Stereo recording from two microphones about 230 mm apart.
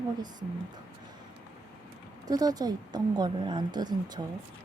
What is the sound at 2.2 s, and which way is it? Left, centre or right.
Speech, centre.